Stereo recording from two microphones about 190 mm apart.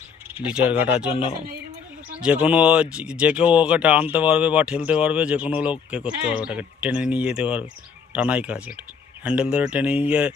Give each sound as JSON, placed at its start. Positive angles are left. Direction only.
{"t": 0.3, "sound": "speech", "side_deg": -5}
{"t": 2.2, "sound": "speech", "side_deg": -5}